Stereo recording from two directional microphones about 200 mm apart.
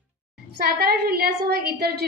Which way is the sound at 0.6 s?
50° right (ahead or behind).